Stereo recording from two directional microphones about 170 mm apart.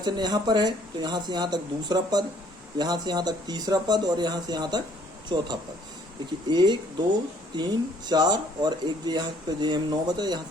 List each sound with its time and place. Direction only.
0.0 s speech: 25° right (ahead or behind)
6.5 s speech: 25° right (ahead or behind)